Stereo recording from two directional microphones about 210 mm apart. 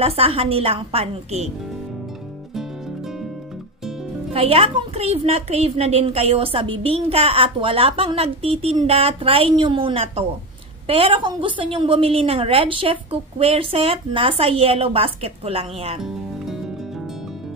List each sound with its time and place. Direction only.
0.0 s a woman's voice: 25° right (ahead or behind)
4.3 s a woman's voice: 30° right (ahead or behind)